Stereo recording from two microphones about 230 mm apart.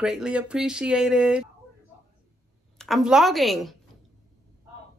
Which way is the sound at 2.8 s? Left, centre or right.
Centre.